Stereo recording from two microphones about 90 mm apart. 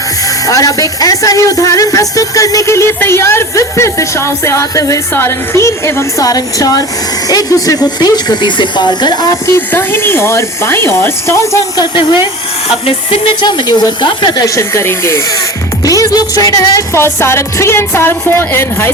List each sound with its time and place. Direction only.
0.4 s speech: 40° left (ahead or behind)
9.6 s speech: 25° left (ahead or behind)
11.9 s speech: 65° left (ahead or behind); by 13.3 s 90° left
13.4 s speech: 55° left (ahead or behind)
14.4 s speech: 35° left (ahead or behind)
15.8 s speech: 40° left (ahead or behind)
16.9 s speech: 25° left (ahead or behind)